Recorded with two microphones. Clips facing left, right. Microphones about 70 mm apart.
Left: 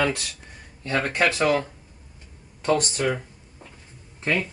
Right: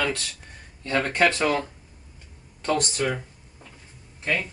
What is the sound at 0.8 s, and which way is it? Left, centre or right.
Speech, centre.